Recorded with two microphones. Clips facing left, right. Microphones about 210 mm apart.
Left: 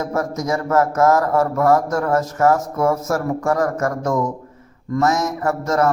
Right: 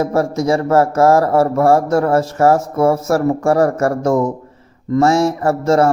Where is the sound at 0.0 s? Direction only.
30° right (ahead or behind).